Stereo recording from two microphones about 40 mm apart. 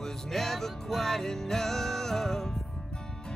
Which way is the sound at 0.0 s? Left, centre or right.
Centre.